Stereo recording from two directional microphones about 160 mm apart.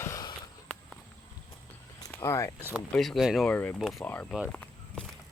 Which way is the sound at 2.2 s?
20° left (ahead or behind).